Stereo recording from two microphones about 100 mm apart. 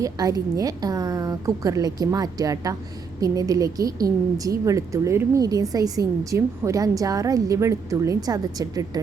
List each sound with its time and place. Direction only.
0.0 s a woman's voice: 35° right (ahead or behind)